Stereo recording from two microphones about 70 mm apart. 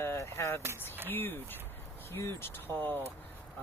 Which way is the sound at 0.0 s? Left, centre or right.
Left.